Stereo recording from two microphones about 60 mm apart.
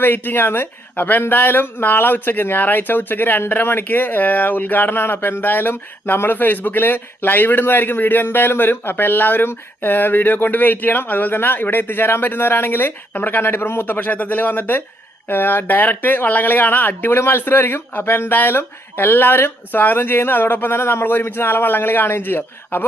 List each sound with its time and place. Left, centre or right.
0.0 s speech: left